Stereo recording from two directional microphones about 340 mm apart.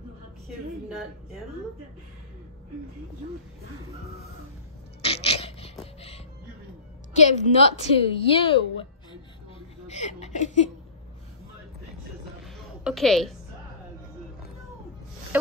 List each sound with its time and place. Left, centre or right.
0.5 s a woman's voice: centre
5.0 s a sound: centre
7.2 s a woman's voice: centre
9.8 s speech: centre
12.8 s a woman's voice: centre